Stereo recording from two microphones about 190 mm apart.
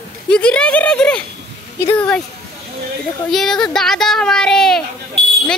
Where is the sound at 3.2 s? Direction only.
Centre (ahead or behind).